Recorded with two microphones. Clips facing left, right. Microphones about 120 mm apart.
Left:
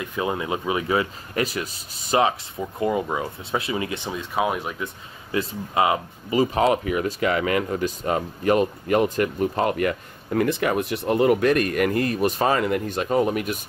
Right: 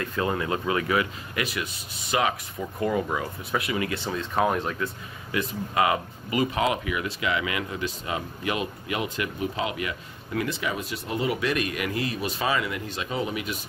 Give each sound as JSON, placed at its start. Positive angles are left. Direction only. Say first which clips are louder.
{"t": 0.0, "sound": "speech", "louder": "left 1 dB", "side_deg": 15}
{"t": 1.3, "sound": "speech", "louder": "left 8 dB", "side_deg": 40}
{"t": 2.6, "sound": "speech", "louder": "left 2 dB", "side_deg": 20}
{"t": 5.3, "sound": "speech", "louder": "left 3 dB", "side_deg": 30}